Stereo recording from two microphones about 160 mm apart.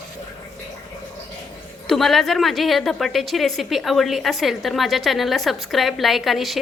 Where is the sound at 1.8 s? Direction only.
Centre (ahead or behind).